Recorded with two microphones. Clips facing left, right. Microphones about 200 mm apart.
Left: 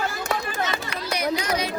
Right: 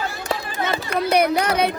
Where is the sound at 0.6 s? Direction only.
55° right (ahead or behind).